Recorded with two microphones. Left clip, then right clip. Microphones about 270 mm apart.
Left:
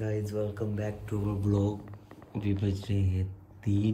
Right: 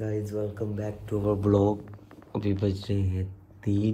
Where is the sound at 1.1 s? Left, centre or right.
Centre.